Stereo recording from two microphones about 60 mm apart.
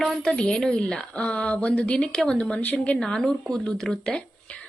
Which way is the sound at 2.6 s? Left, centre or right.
Left.